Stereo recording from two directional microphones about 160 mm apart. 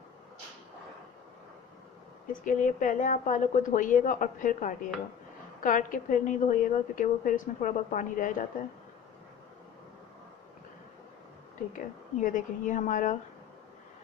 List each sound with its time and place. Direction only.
2.4 s a woman's voice: 55° left (ahead or behind)
11.7 s a woman's voice: 55° left (ahead or behind)